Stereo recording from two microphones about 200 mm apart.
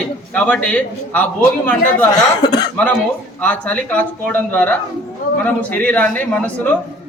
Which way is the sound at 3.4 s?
5° left (ahead or behind).